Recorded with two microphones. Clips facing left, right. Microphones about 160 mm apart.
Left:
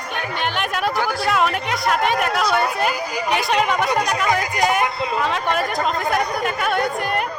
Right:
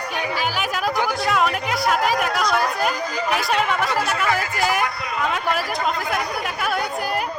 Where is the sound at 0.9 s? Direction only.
20° right (ahead or behind).